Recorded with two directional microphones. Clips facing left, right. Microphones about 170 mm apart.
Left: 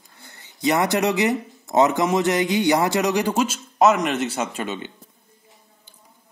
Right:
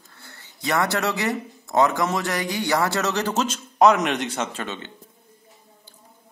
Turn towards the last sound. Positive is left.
turn(degrees=10)  # may be behind; listen again after turning